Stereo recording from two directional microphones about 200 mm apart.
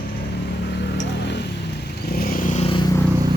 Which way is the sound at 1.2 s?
60° left (ahead or behind).